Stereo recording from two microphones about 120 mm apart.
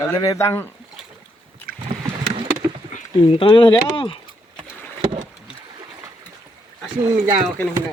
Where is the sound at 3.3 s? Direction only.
45° left (ahead or behind).